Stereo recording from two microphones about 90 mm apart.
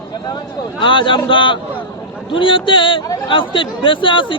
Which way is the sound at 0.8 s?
70° left (ahead or behind).